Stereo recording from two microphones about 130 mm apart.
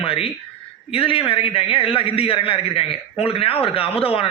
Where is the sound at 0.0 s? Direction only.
45° left (ahead or behind).